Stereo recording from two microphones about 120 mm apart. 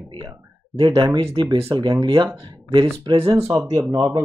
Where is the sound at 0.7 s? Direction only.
40° right (ahead or behind).